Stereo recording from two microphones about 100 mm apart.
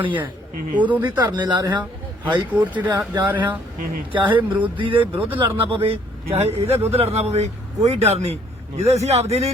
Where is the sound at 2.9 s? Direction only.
35° right (ahead or behind).